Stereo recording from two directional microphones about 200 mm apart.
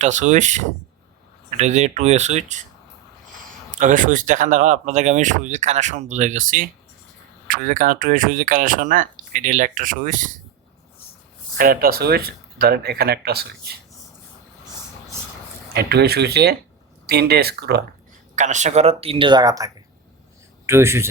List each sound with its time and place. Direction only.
0.0 s speech: 35° right (ahead or behind)
3.7 s speech: 40° right (ahead or behind)
11.5 s speech: 45° right (ahead or behind)
15.7 s speech: 55° right (ahead or behind)
18.3 s a man's voice: 35° right (ahead or behind); by 21.1 s 10° right (ahead or behind)